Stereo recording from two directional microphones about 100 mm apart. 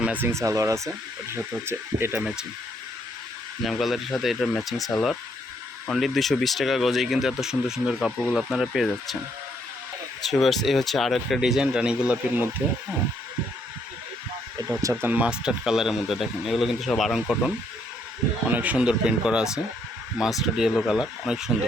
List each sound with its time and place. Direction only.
0.0 s speech: 15° right (ahead or behind)
3.6 s speech: centre (ahead or behind)
10.2 s speech: centre (ahead or behind)
14.6 s speech: 45° right (ahead or behind)
15.0 s speech: 15° right (ahead or behind)
18.4 s speech: 15° right (ahead or behind)